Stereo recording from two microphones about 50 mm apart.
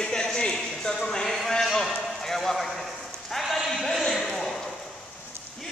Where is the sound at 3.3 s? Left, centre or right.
Centre.